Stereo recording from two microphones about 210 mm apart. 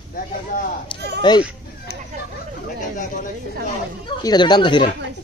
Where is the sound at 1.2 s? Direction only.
20° left (ahead or behind).